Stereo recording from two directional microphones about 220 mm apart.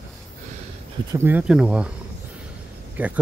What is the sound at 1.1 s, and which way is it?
Speech, 10° right (ahead or behind).